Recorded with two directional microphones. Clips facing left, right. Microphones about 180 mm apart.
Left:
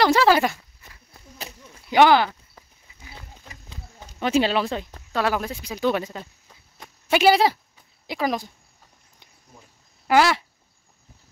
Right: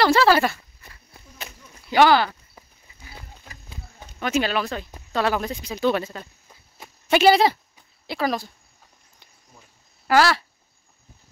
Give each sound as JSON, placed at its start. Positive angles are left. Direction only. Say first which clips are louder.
{"t": 0.0, "sound": "speech", "louder": "even", "side_deg": 15}
{"t": 1.9, "sound": "speech", "louder": "left 1 dB", "side_deg": 20}
{"t": 4.2, "sound": "speech", "louder": "left 2 dB", "side_deg": 25}
{"t": 5.1, "sound": "speech", "louder": "right 1 dB", "side_deg": 10}
{"t": 10.0, "sound": "speech", "louder": "even", "side_deg": 20}